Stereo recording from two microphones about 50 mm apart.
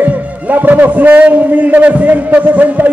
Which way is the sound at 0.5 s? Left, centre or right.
Right.